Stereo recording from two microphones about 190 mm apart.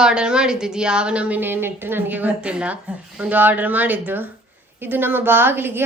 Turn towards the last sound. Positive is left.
turn(degrees=-10)  # may be behind; listen again after turning